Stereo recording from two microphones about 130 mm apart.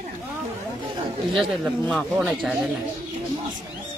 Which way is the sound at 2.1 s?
10° right (ahead or behind).